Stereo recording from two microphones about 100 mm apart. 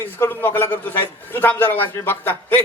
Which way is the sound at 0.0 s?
20° left (ahead or behind).